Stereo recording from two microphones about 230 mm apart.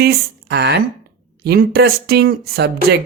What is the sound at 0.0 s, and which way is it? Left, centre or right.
Speech, right.